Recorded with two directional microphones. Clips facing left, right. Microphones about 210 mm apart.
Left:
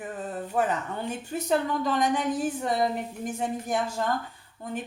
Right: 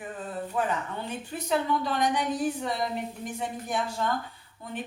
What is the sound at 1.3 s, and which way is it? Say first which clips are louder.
Speech: left 1 dB; 45° left (ahead or behind).